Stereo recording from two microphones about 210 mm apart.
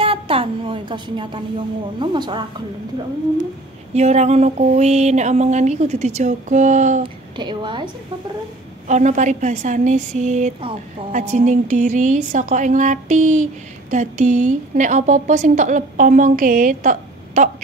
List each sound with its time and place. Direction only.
0.0 s a woman's voice: 25° right (ahead or behind)
3.9 s speech: 30° right (ahead or behind)
7.0 s a woman's voice: 20° right (ahead or behind)
8.8 s speech: 35° right (ahead or behind)